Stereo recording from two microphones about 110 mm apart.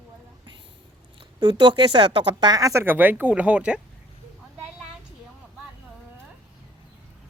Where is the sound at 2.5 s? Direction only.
30° right (ahead or behind).